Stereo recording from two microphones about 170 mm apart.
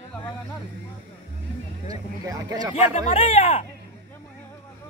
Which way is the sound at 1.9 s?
20° right (ahead or behind).